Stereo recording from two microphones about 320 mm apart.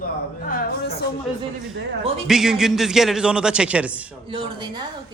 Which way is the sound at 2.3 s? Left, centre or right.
Centre.